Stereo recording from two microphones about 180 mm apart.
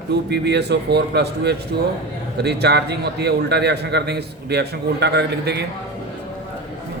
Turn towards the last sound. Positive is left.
turn(degrees=-65)  # may be behind; listen again after turning